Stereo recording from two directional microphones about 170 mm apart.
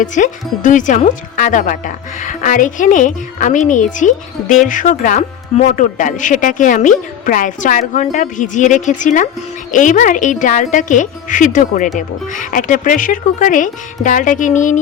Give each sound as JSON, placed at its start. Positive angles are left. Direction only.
{"t": 0.0, "sound": "speech", "side_deg": 50}